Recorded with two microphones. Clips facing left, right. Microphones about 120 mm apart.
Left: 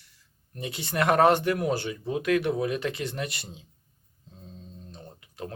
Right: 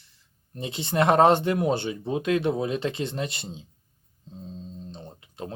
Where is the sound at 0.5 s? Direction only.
25° right (ahead or behind).